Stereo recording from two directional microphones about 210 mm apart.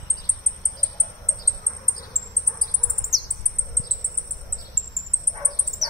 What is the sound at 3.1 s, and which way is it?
Bird, 15° right (ahead or behind).